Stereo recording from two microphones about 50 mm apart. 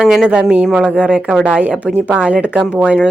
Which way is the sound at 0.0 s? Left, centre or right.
Centre.